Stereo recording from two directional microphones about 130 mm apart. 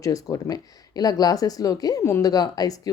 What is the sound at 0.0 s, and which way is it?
Speech, 25° left (ahead or behind).